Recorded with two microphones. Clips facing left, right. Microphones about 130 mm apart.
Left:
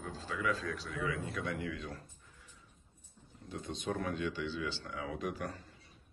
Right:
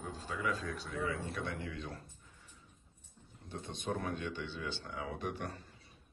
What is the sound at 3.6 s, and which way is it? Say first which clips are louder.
Speech: left 1 dB; 25° right (ahead or behind).